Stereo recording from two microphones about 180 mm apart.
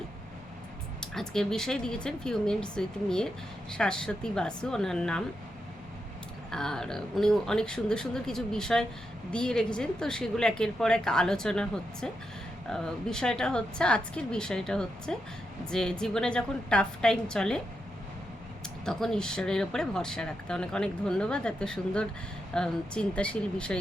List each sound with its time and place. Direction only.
1.1 s speech: 5° left (ahead or behind)
6.5 s speech: 5° left (ahead or behind)
18.9 s speech: 5° left (ahead or behind)